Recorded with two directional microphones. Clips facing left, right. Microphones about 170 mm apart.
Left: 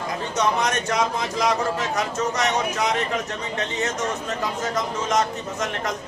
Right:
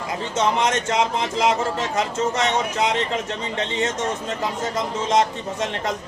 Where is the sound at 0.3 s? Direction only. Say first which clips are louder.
Right 2 dB; 25° right (ahead or behind).